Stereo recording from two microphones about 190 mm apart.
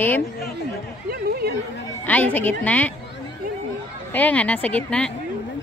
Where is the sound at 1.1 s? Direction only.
55° right (ahead or behind).